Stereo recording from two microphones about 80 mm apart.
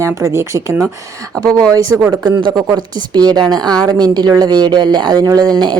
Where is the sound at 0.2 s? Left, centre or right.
Right.